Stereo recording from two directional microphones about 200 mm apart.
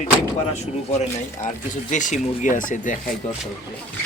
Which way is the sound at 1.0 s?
40° left (ahead or behind).